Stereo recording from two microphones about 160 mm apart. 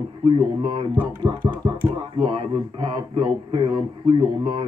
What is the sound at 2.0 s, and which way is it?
Speech, 35° right (ahead or behind).